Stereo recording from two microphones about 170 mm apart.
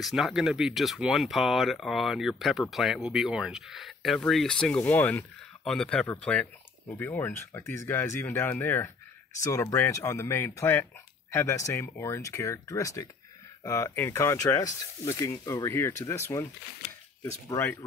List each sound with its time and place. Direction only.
0.0 s speech: centre (ahead or behind); by 16.4 s 15° left (ahead or behind)